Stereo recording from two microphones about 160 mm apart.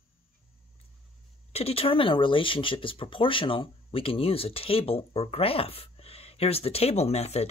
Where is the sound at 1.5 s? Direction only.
40° left (ahead or behind).